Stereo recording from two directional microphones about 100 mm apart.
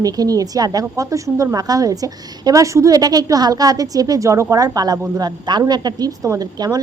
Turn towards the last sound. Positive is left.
turn(degrees=-40)  # may be behind; listen again after turning